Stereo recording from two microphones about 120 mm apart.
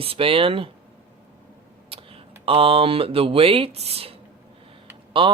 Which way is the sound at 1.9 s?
50° right (ahead or behind).